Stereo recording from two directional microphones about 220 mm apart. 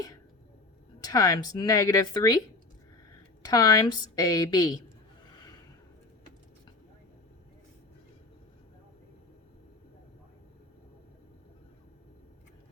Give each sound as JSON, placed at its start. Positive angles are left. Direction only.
{"t": 1.0, "sound": "speech", "side_deg": 15}
{"t": 3.4, "sound": "speech", "side_deg": 20}